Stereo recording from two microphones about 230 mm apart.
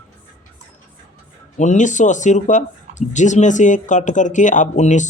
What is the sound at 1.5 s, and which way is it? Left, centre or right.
Speech, left.